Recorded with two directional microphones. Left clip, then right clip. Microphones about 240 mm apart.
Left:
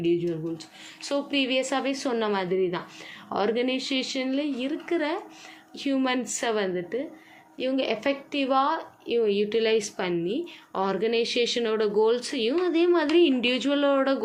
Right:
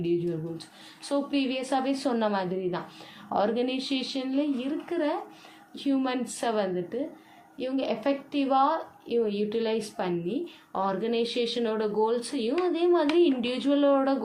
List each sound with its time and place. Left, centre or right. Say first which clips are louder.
0.0 s a woman's voice: left 3 dB; left